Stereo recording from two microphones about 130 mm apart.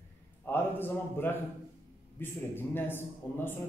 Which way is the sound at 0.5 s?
15° left (ahead or behind).